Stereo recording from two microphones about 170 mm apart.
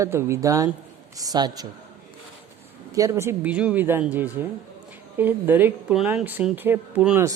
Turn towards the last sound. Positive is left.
turn(degrees=-10)  # may be behind; listen again after turning